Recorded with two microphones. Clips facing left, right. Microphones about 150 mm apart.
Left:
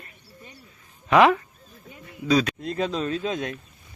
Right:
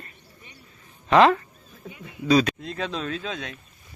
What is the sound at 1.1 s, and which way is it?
Speech, 10° left (ahead or behind).